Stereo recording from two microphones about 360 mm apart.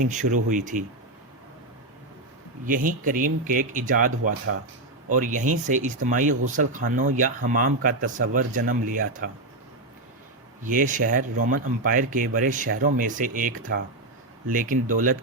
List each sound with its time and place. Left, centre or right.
0.0 s speech: right
2.6 s speech: right
10.6 s speech: right